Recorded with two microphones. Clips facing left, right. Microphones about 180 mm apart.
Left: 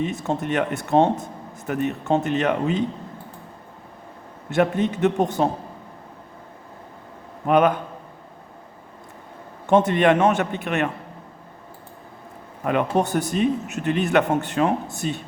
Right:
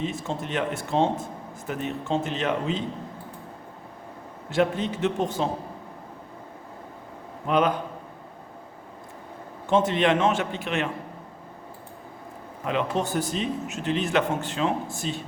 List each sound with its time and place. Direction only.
0.1 s speech: 65° left (ahead or behind)
4.5 s speech: 60° left (ahead or behind)
7.4 s speech: 55° left (ahead or behind)
9.6 s speech: 65° left (ahead or behind)
12.6 s speech: 60° left (ahead or behind)